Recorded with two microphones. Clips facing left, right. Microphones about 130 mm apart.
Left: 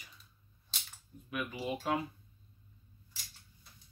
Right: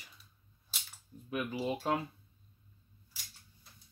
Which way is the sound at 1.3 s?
30° right (ahead or behind).